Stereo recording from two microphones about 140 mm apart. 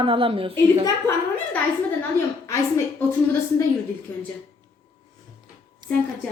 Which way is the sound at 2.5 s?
20° left (ahead or behind).